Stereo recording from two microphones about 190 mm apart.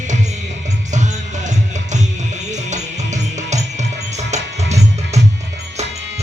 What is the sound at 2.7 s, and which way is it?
Music, 40° right (ahead or behind).